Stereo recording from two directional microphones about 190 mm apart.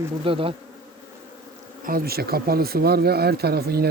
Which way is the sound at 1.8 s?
50° right (ahead or behind).